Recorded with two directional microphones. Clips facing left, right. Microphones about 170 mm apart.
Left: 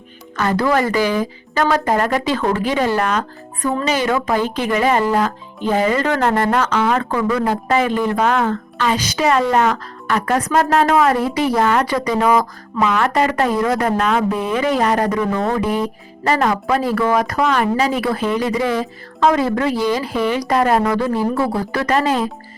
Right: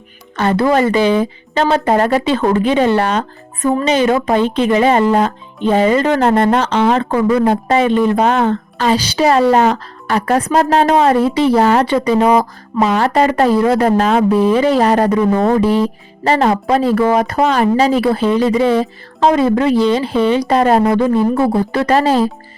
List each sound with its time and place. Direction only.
0.3 s speech: 25° right (ahead or behind)